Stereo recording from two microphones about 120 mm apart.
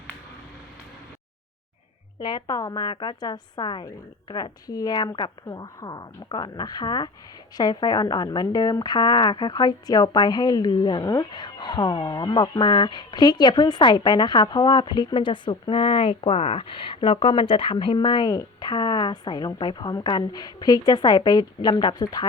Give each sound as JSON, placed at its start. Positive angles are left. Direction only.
{"t": 2.1, "sound": "a woman's voice", "side_deg": 35}